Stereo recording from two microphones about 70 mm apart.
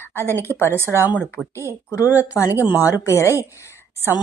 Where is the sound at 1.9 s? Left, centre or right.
Left.